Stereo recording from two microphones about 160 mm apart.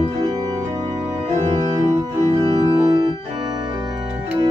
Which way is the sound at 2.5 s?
30° right (ahead or behind).